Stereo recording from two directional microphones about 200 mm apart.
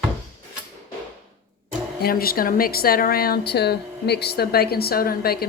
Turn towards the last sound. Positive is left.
turn(degrees=50)  # may be behind; listen again after turning